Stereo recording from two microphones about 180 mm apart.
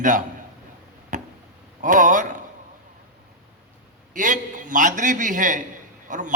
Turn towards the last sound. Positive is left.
turn(degrees=-45)  # may be behind; listen again after turning